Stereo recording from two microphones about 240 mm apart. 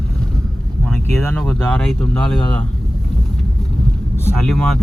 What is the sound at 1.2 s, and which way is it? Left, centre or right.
Speech, centre.